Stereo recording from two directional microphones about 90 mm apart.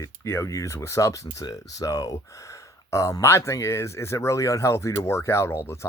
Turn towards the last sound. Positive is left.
turn(degrees=30)  # may be behind; listen again after turning